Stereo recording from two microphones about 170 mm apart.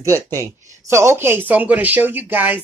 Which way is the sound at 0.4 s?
15° right (ahead or behind).